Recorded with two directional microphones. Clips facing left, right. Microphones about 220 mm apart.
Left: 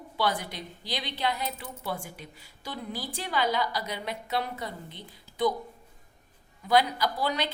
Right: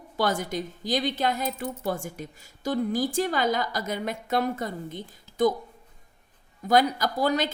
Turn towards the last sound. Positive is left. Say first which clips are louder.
# right 4 dB
turn(degrees=-45)  # may be behind; listen again after turning